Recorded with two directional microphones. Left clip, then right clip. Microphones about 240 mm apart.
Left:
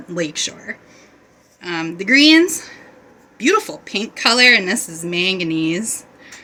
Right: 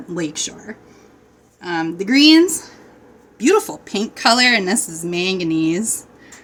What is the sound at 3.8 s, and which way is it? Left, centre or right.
Speech, centre.